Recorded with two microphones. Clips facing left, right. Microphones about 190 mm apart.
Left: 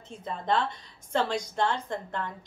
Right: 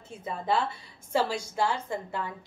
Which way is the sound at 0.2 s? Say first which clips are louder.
Even; 10° right (ahead or behind).